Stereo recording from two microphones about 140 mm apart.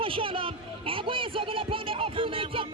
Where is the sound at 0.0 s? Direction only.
40° right (ahead or behind).